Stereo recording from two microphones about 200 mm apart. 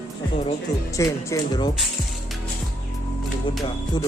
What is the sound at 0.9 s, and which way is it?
Speech, 15° left (ahead or behind).